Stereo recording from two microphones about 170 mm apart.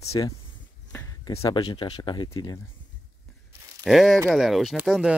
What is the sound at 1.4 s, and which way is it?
Speech, 30° left (ahead or behind).